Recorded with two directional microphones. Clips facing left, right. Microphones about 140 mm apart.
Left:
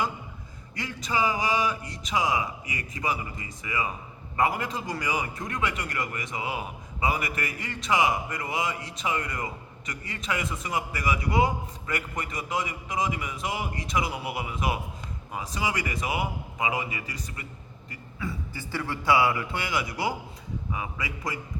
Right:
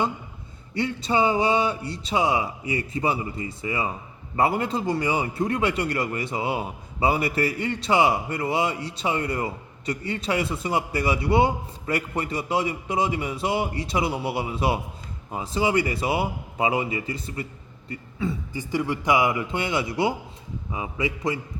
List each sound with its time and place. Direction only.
0.7 s a man's voice: 30° right (ahead or behind)